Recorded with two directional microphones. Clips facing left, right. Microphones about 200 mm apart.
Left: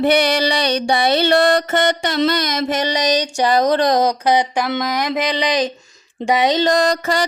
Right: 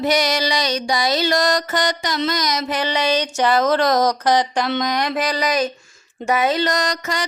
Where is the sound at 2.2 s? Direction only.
60° left (ahead or behind); by 3.2 s 40° left (ahead or behind).